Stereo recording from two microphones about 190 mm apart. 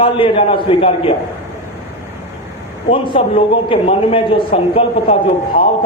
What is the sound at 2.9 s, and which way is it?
A man's voice, 30° left (ahead or behind).